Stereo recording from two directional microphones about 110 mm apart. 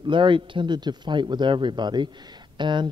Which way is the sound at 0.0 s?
45° right (ahead or behind).